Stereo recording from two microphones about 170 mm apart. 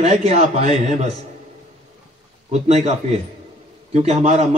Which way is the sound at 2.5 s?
40° right (ahead or behind).